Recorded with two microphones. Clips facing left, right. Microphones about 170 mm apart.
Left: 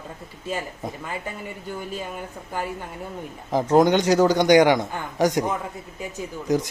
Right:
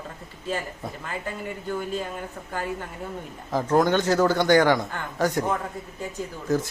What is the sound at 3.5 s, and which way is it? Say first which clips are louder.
A man's voice: left 3 dB; 20° left (ahead or behind).